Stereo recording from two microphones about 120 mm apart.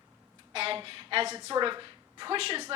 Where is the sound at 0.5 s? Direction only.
55° right (ahead or behind).